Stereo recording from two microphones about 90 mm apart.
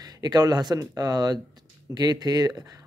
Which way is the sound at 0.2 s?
45° right (ahead or behind).